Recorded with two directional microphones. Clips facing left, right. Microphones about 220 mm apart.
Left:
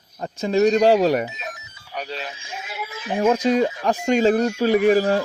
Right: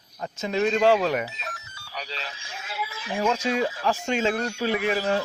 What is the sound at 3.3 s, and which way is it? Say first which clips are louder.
Speech: left 8 dB; 35° left (ahead or behind).